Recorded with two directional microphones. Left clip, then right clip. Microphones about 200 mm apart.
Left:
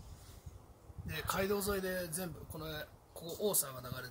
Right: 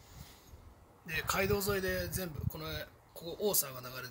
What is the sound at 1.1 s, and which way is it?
A man's voice, 20° right (ahead or behind).